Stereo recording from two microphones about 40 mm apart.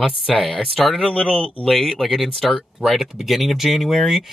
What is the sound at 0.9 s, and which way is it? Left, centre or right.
Speech, left.